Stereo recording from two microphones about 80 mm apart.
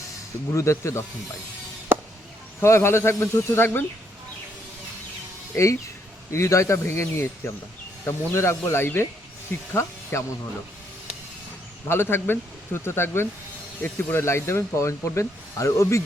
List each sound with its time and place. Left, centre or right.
0.5 s speech: left
1.9 s a sound: right
2.6 s speech: left
5.5 s speech: left
11.9 s speech: left